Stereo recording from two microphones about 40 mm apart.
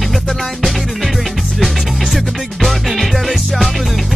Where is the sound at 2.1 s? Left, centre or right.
Centre.